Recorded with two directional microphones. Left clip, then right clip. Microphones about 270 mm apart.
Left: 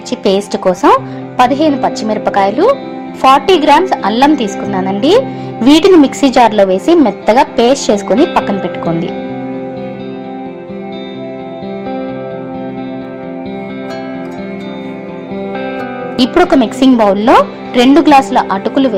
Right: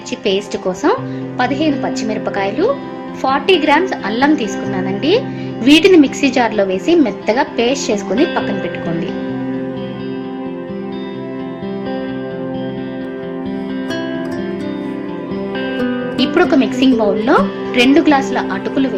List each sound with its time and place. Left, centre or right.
0.1 s speech: left
16.1 s speech: left